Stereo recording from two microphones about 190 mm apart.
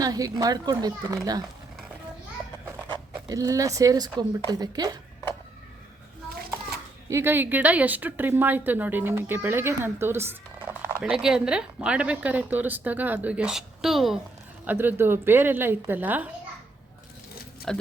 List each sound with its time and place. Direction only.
0.0 s a child's voice: 20° right (ahead or behind)
2.6 s speech: 15° right (ahead or behind)
7.1 s a woman's voice: 15° right (ahead or behind)
17.7 s speech: 5° left (ahead or behind)